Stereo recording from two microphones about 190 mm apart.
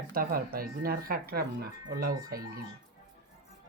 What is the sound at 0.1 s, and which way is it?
Speech, 50° right (ahead or behind).